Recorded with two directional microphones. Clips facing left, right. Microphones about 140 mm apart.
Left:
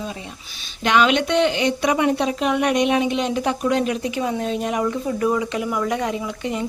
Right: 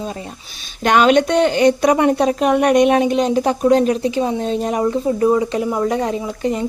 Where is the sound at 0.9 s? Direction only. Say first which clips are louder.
Right 5 dB; 45° right (ahead or behind).